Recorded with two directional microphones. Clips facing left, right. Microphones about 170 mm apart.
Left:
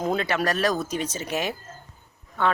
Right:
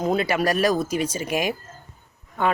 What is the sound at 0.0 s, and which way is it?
Speech, 5° right (ahead or behind).